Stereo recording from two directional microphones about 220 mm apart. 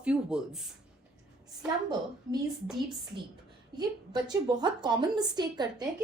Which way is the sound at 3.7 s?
20° right (ahead or behind).